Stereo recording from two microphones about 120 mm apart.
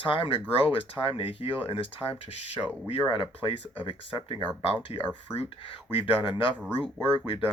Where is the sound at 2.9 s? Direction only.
45° left (ahead or behind).